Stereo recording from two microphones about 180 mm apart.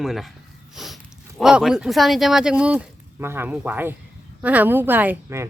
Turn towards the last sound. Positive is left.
turn(degrees=-10)  # may be behind; listen again after turning